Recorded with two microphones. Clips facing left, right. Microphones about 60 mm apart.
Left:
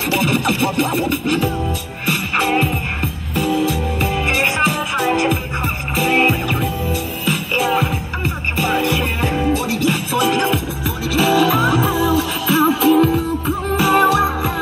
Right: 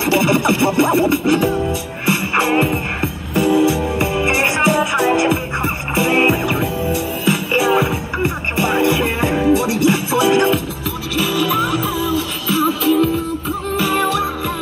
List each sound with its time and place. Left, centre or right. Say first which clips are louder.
0.0 s music: right 3 dB; centre
11.1 s music: left 3 dB; left
13.7 s music: left 4 dB; left